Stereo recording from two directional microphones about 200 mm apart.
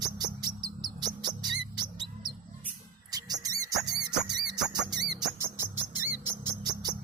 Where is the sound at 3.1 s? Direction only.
20° right (ahead or behind).